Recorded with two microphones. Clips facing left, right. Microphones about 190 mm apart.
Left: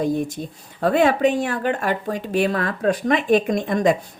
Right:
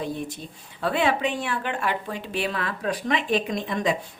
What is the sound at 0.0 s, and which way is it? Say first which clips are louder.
Speech: left 8 dB; 45° left (ahead or behind).